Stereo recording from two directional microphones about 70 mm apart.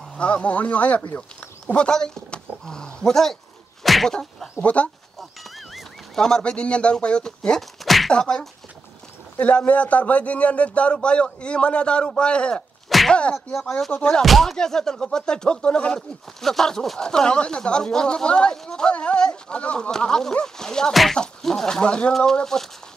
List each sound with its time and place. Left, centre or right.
0.2 s speech: centre
3.8 s a sound: centre
4.6 s speech: left
5.4 s a sound: centre
8.1 s speech: centre
14.2 s speech: centre